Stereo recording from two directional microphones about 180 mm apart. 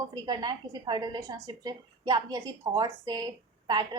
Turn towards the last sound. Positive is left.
turn(degrees=-25)  # may be behind; listen again after turning